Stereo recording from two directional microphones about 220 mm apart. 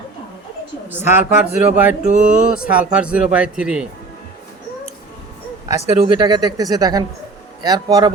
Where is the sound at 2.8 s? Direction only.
5° right (ahead or behind).